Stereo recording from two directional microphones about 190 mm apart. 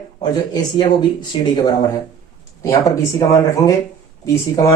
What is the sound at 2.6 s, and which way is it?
Speech, 15° left (ahead or behind).